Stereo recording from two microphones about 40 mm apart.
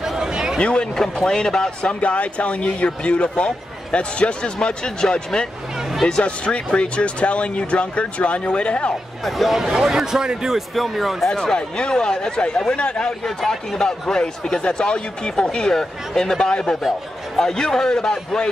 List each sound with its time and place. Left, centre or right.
0.2 s a sound: centre
0.6 s a man's voice: left
1.8 s speech: left
6.2 s speech: left
9.2 s speech: centre
10.7 s speech: centre
11.5 s speech: left
13.2 s a man's voice: centre